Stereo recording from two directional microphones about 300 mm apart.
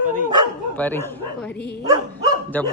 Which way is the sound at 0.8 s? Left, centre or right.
Centre.